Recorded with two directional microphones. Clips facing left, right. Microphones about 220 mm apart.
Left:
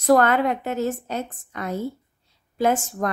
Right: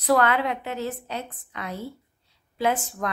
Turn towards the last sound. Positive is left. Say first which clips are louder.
# left 4 dB
turn(degrees=45)  # may be behind; listen again after turning